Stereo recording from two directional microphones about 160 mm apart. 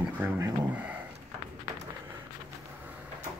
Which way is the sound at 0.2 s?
10° right (ahead or behind).